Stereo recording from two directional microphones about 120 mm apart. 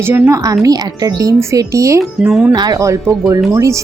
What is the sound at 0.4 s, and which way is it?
Speech, 30° right (ahead or behind).